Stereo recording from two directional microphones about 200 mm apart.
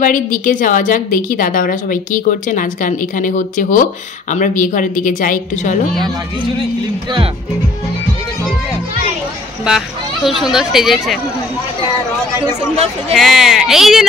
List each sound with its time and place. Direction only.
0.0 s a woman's voice: 40° left (ahead or behind)
9.7 s speech: centre (ahead or behind)
13.1 s speech: centre (ahead or behind)